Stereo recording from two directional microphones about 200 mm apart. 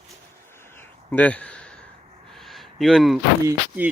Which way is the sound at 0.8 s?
10° left (ahead or behind).